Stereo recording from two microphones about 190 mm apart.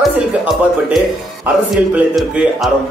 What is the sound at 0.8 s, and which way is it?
Speech, 5° right (ahead or behind).